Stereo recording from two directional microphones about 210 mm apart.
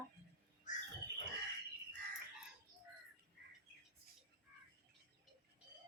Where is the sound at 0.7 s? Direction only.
35° left (ahead or behind).